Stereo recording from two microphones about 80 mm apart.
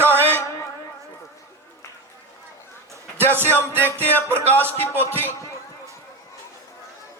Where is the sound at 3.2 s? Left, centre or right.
Right.